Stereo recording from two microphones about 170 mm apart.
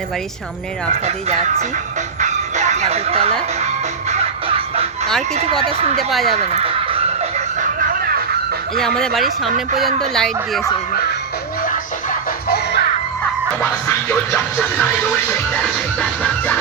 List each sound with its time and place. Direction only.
1.0 s speech: 40° right (ahead or behind)
2.2 s music: 45° right (ahead or behind)
5.6 s speech: 35° right (ahead or behind)
6.0 s speech: centre (ahead or behind)
6.3 s music: 35° right (ahead or behind)
8.8 s speech: centre (ahead or behind)
13.6 s music: 10° left (ahead or behind)
16.0 s music: 5° left (ahead or behind)